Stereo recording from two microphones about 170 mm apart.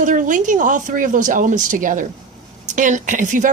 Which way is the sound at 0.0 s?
50° right (ahead or behind).